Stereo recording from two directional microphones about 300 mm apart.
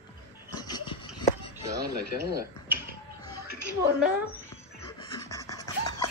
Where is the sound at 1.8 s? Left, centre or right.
Right.